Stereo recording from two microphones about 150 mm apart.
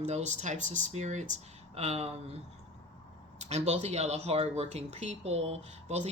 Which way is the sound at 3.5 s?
45° right (ahead or behind).